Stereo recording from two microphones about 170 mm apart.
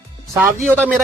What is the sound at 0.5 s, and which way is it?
Speech, 10° right (ahead or behind).